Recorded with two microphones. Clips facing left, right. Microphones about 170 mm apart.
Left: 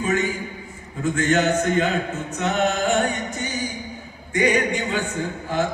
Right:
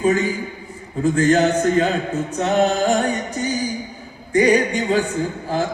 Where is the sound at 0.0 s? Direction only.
35° right (ahead or behind).